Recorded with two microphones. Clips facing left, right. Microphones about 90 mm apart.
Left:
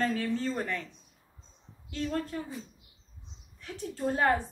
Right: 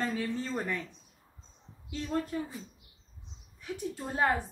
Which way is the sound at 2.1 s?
15° right (ahead or behind).